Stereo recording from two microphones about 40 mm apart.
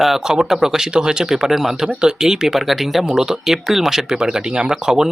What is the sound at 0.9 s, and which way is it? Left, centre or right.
Speech, right.